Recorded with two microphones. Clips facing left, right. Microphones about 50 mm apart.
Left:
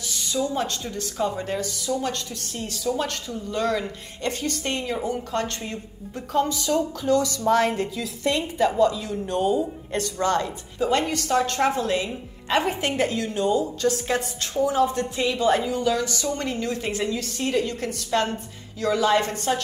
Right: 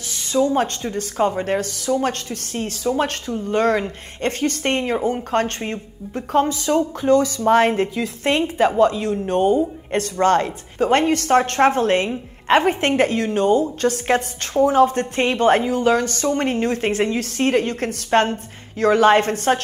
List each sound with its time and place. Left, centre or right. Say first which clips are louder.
0.1 s a woman's voice: right 8 dB; right